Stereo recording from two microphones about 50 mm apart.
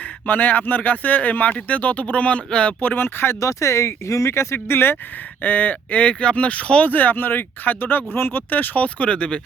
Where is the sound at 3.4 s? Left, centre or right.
Left.